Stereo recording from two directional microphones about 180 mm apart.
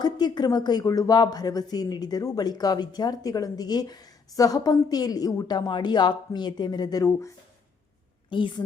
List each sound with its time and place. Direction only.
0.0 s speech: 25° left (ahead or behind)